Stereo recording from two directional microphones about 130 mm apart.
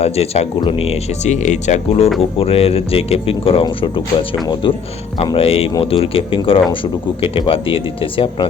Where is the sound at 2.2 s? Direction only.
50° left (ahead or behind).